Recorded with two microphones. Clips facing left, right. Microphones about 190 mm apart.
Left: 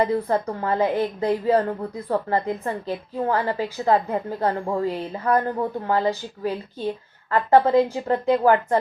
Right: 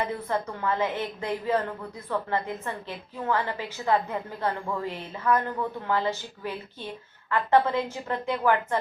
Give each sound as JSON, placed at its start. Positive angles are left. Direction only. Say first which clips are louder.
{"t": 0.0, "sound": "a woman's voice", "louder": "left 8 dB", "side_deg": 35}